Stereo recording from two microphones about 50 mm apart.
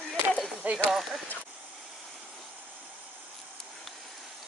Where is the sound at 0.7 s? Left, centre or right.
Right.